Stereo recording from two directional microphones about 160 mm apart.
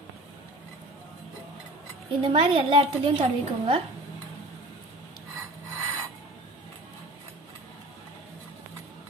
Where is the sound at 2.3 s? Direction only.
35° right (ahead or behind).